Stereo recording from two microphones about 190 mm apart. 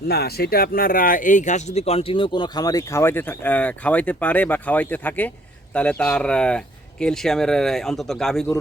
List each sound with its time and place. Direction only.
0.1 s speech: 55° left (ahead or behind); by 8.5 s centre (ahead or behind)